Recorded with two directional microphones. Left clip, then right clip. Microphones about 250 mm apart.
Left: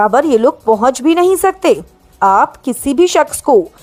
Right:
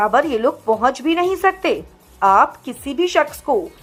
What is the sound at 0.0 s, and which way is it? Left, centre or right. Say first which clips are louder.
Speech: left 6 dB; left.